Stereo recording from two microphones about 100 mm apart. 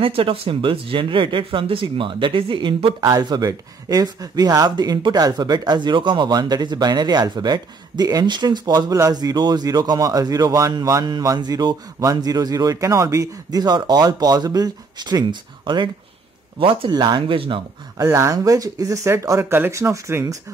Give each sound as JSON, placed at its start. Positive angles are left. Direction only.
{"t": 0.0, "sound": "speech", "side_deg": -65}
{"t": 3.1, "sound": "speech", "side_deg": -45}
{"t": 18.0, "sound": "speech", "side_deg": -30}